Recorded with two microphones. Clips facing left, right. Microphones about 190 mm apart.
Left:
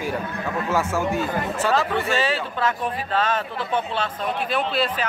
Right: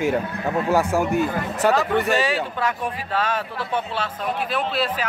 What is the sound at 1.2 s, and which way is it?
Speech, 15° right (ahead or behind).